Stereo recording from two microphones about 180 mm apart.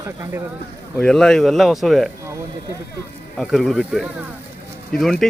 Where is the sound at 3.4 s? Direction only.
Centre (ahead or behind).